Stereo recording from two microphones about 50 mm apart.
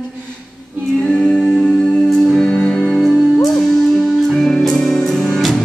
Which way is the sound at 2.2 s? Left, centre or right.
Centre.